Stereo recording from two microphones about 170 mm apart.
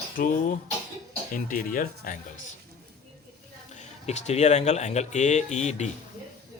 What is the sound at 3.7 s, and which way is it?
Speech, 40° left (ahead or behind).